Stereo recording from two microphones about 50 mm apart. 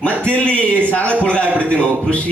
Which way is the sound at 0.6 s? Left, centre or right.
Right.